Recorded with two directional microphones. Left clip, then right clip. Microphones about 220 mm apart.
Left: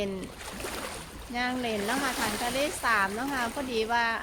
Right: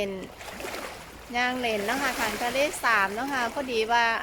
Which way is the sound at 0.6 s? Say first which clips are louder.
Right 1 dB; 35° left (ahead or behind).